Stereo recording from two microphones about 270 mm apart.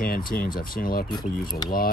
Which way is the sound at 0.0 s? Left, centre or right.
Left.